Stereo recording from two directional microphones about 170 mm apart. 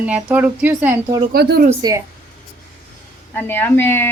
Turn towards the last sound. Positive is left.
turn(degrees=15)  # may be behind; listen again after turning